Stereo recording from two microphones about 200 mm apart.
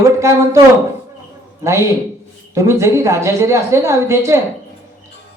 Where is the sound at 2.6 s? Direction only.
15° right (ahead or behind).